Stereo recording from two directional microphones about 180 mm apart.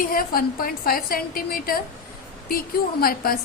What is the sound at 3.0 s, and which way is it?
Speech, 55° left (ahead or behind).